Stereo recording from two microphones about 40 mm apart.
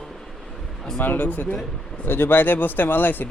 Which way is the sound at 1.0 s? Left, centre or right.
Left.